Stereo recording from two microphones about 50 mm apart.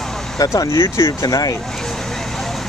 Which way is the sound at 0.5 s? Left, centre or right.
Left.